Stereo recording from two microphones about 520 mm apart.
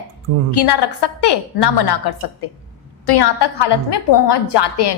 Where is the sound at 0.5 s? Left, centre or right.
Left.